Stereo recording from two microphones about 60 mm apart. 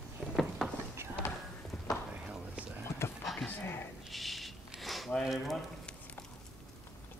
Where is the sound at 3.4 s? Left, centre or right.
Left.